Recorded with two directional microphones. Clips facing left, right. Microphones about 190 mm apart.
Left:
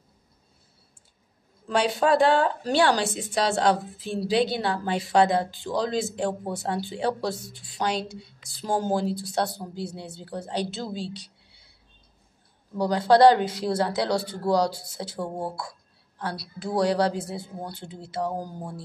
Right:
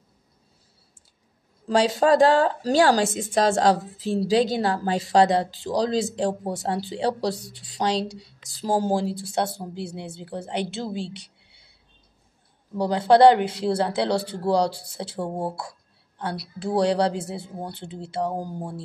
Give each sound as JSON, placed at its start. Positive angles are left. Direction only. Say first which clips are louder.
{"t": 1.7, "sound": "a woman's voice", "louder": "right 3 dB", "side_deg": -35}
{"t": 12.7, "sound": "speech", "louder": "right 2 dB", "side_deg": -25}